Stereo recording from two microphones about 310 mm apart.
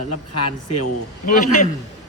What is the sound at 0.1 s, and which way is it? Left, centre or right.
Speech, left.